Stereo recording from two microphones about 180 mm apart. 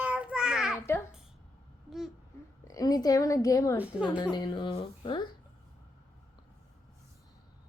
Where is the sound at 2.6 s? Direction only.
20° left (ahead or behind).